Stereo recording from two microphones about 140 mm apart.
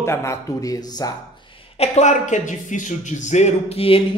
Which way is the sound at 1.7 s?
50° left (ahead or behind).